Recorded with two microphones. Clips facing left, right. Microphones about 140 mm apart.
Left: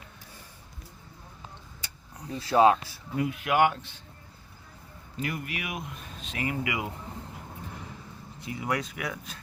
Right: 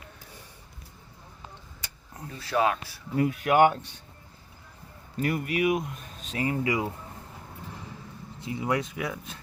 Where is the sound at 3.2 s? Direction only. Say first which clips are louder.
Right 4 dB; 40° right (ahead or behind).